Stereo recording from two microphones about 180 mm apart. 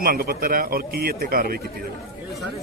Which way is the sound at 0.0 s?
55° right (ahead or behind).